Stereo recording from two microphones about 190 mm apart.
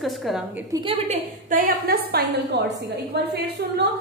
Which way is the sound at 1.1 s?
45° right (ahead or behind).